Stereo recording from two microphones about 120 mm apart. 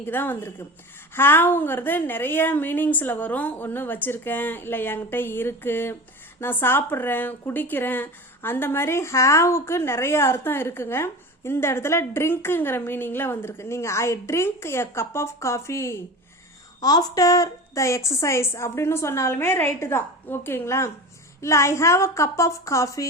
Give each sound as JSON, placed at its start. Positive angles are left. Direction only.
{"t": 0.0, "sound": "a woman's voice", "side_deg": 15}
{"t": 16.8, "sound": "speech", "side_deg": 35}